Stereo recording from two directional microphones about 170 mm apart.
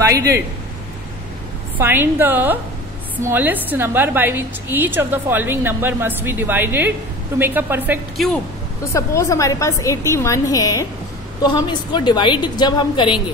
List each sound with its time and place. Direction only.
0.0 s a man's voice: 20° right (ahead or behind)
1.8 s a woman's voice: 10° right (ahead or behind)
8.9 s a woman's voice: 15° left (ahead or behind)